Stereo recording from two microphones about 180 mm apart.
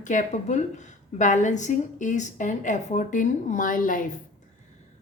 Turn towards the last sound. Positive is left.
turn(degrees=50)  # may be behind; listen again after turning